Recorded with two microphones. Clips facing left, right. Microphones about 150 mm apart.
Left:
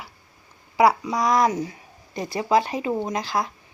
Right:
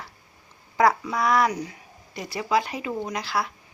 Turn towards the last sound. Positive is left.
turn(degrees=30)  # may be behind; listen again after turning